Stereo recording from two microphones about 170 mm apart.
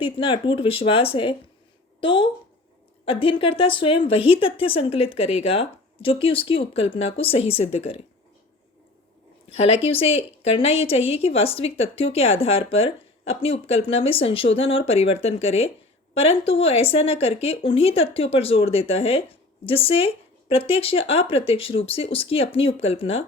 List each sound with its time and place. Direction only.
0.0 s speech: 30° left (ahead or behind)
9.8 s speech: 35° left (ahead or behind)